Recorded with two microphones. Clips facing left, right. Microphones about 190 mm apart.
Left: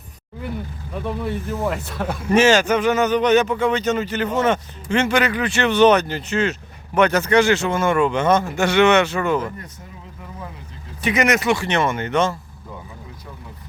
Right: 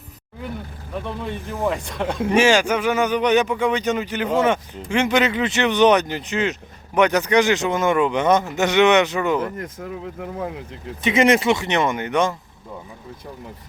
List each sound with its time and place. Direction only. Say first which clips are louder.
1.5 s speech: right 1 dB; 15° right (ahead or behind)
9.6 s speech: right 9 dB; 90° right
11.0 s speech: right 2 dB; 25° right (ahead or behind)